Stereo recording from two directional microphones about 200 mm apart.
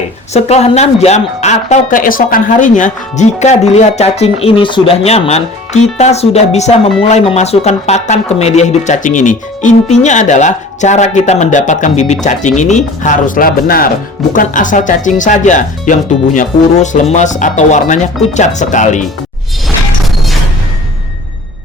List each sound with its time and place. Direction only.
0.3 s speech: 30° left (ahead or behind)